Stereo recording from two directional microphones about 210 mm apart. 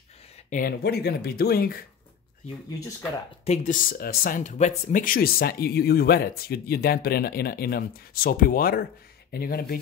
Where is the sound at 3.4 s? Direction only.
35° left (ahead or behind).